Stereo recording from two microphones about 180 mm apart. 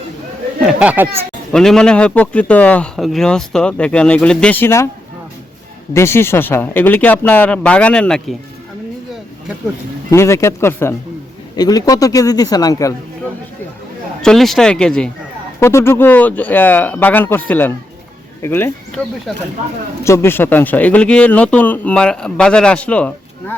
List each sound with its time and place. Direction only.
0.6 s speech: 5° right (ahead or behind)
1.5 s a man's voice: 5° left (ahead or behind)
5.9 s speech: 15° left (ahead or behind)
10.1 s a man's voice: 15° left (ahead or behind)
14.2 s a man's voice: centre (ahead or behind)
20.1 s speech: 15° left (ahead or behind)